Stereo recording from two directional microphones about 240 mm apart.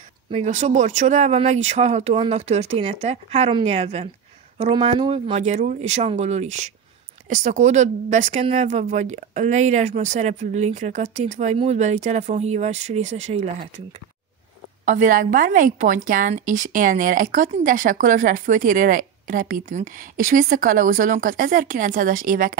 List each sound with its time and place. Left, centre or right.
0.3 s speech: right
14.9 s a woman's voice: right